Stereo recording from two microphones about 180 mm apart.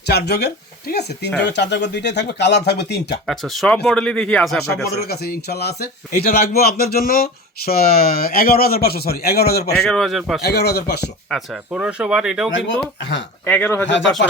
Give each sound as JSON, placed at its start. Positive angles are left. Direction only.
{"t": 0.0, "sound": "speech", "side_deg": 65}
{"t": 3.2, "sound": "speech", "side_deg": 0}
{"t": 4.9, "sound": "speech", "side_deg": 60}
{"t": 9.9, "sound": "speech", "side_deg": 0}
{"t": 10.4, "sound": "speech", "side_deg": 65}
{"t": 11.3, "sound": "speech", "side_deg": 0}
{"t": 13.0, "sound": "speech", "side_deg": 90}
{"t": 13.4, "sound": "speech", "side_deg": 10}